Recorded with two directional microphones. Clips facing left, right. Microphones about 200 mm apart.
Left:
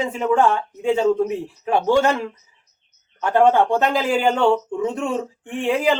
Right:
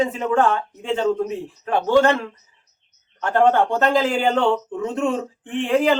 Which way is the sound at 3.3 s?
10° left (ahead or behind).